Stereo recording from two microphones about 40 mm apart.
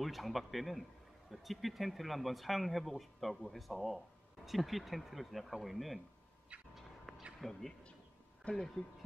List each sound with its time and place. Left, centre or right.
0.0 s speech: centre
6.7 s a sound: centre
7.3 s speech: centre
8.5 s speech: left